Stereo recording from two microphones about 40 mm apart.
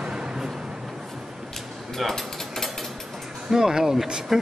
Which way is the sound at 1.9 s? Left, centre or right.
Centre.